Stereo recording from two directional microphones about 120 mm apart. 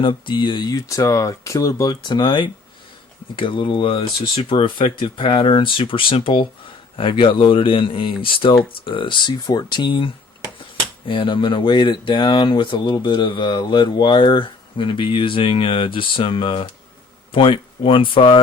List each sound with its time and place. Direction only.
0.0 s speech: 40° left (ahead or behind)
11.1 s speech: 45° left (ahead or behind)